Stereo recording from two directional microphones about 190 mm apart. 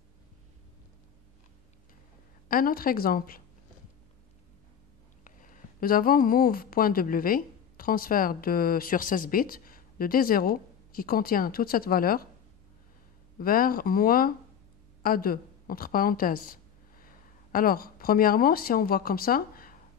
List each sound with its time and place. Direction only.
2.4 s a woman's voice: 50° left (ahead or behind)
5.2 s a woman's voice: 45° left (ahead or behind)
13.4 s a woman's voice: 50° left (ahead or behind)